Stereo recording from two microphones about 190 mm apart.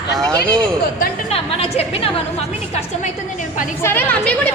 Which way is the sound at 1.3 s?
30° left (ahead or behind).